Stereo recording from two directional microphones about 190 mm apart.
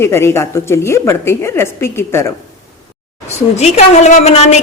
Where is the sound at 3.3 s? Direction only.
35° left (ahead or behind).